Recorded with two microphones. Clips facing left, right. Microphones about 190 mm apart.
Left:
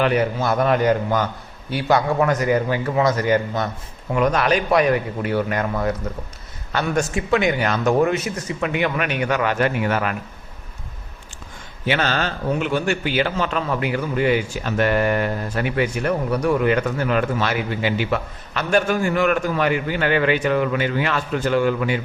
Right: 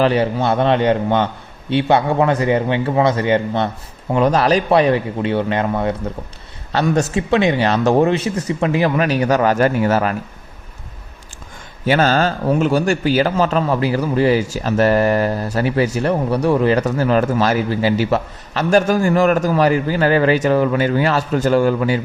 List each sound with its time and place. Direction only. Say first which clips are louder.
0.0 s a man's voice: right 3 dB; 30° right (ahead or behind)
11.9 s a man's voice: right 6 dB; 40° right (ahead or behind)